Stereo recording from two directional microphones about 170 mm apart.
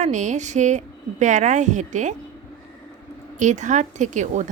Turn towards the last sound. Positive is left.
turn(degrees=-45)  # may be behind; listen again after turning